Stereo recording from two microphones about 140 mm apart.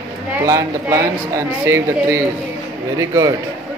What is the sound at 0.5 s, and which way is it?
Speech, 20° right (ahead or behind).